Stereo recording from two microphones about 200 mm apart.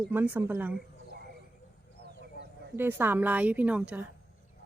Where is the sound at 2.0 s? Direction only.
55° right (ahead or behind).